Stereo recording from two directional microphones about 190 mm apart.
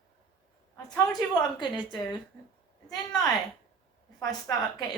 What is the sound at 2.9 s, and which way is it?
Speech, 20° left (ahead or behind).